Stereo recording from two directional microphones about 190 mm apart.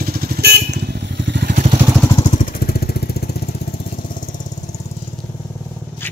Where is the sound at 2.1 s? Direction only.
40° left (ahead or behind); by 3.4 s 55° left (ahead or behind).